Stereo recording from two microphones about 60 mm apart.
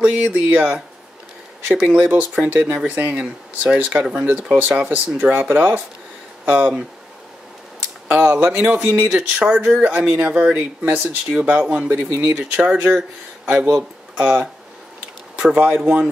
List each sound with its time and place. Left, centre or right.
0.0 s speech: right
1.7 s speech: right
3.2 s speech: right
8.1 s speech: right
8.5 s speech: centre